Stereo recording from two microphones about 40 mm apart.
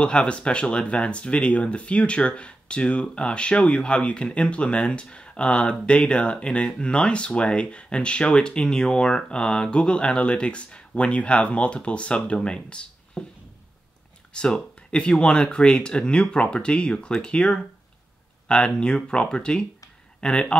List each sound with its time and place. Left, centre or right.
0.0 s speech: left
14.3 s speech: left